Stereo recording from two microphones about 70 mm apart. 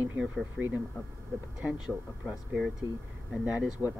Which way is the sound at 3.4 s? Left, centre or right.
Right.